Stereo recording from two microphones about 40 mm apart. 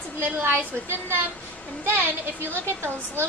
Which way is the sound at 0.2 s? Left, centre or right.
Right.